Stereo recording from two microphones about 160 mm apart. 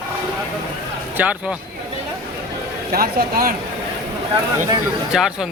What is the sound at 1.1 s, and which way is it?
Speech, 10° right (ahead or behind).